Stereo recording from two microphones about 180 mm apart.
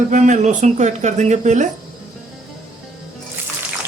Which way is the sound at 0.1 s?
40° right (ahead or behind).